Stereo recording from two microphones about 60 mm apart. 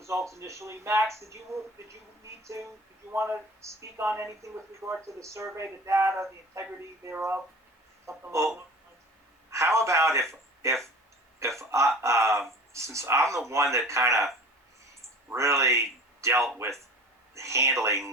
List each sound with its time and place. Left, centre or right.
0.0 s speech: right
9.5 s speech: right
15.3 s a man's voice: right